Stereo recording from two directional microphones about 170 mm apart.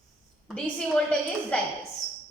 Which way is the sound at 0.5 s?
5° left (ahead or behind).